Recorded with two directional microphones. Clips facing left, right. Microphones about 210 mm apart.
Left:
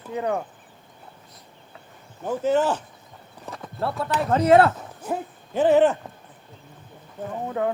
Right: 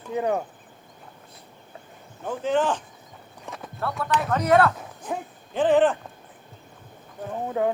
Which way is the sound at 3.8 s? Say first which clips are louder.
Left 1 dB; 30° left (ahead or behind).